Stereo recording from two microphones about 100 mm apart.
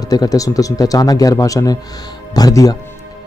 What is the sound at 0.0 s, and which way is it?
Speech, 40° left (ahead or behind).